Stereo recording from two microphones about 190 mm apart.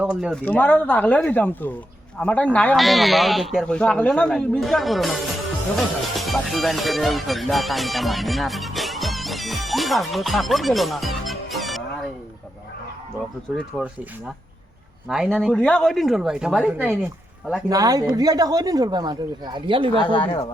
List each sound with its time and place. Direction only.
0.0 s speech: 5° right (ahead or behind)
0.4 s speech: 10° left (ahead or behind)
6.1 s music: centre (ahead or behind)
13.6 s speech: centre (ahead or behind)
15.1 s speech: 5° right (ahead or behind)
17.7 s speech: 20° right (ahead or behind)
20.0 s speech: 25° left (ahead or behind)